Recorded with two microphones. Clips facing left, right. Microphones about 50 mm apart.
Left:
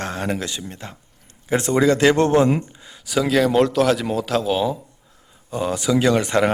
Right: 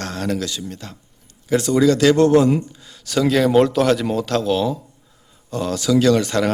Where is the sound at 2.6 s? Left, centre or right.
Centre.